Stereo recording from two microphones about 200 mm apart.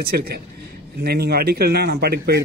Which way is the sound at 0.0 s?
50° right (ahead or behind).